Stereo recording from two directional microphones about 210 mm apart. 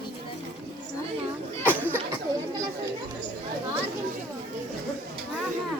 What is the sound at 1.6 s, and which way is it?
Chatter, 10° left (ahead or behind).